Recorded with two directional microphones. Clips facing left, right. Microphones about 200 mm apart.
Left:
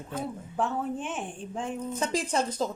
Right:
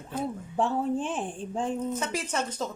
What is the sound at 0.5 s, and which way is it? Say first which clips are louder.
Speech: right 3 dB; 30° right (ahead or behind).